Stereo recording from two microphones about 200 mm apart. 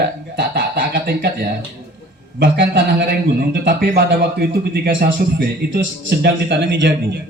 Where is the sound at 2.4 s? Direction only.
60° right (ahead or behind).